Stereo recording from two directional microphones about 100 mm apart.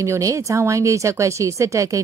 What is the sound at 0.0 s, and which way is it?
Speech, 30° right (ahead or behind).